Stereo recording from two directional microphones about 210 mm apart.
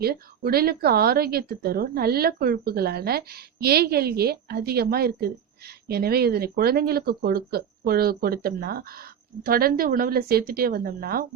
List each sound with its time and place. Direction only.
0.0 s a woman's voice: 45° right (ahead or behind)